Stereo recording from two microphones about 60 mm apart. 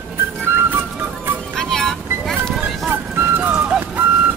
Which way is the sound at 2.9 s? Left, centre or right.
Right.